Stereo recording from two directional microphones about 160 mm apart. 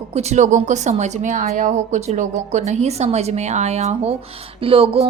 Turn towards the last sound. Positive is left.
turn(degrees=-35)  # may be behind; listen again after turning